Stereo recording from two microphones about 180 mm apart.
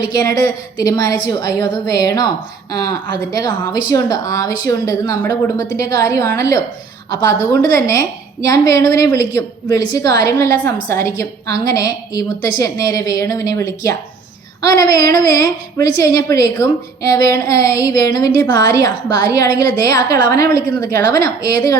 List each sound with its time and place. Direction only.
0.0 s a woman's voice: 20° left (ahead or behind)
3.7 s a woman's voice: 20° left (ahead or behind)
7.6 s a woman's voice: 20° left (ahead or behind)